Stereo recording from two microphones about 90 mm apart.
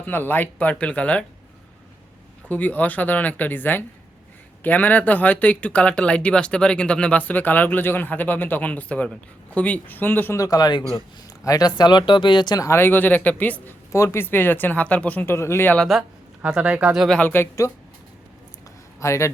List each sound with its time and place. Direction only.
0.0 s speech: 20° left (ahead or behind)
2.5 s speech: 20° left (ahead or behind)
10.3 s speech: 40° left (ahead or behind)
12.6 s speech: 25° left (ahead or behind)
13.9 s speech: 30° left (ahead or behind)
15.4 s speech: 30° left (ahead or behind)
15.9 s speech: centre (ahead or behind)
16.4 s speech: 15° right (ahead or behind)
17.1 s speech: 15° left (ahead or behind)
18.9 s speech: 35° left (ahead or behind)